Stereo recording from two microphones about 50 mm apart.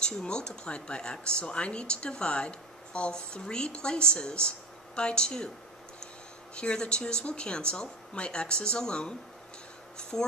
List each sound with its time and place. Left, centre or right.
0.0 s speech: centre
6.5 s speech: centre
10.1 s speech: centre